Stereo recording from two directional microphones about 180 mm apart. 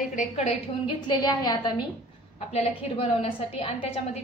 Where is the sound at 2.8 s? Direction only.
30° left (ahead or behind).